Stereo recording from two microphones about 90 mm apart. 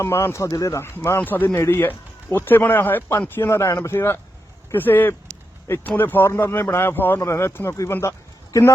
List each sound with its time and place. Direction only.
0.0 s speech: 30° left (ahead or behind)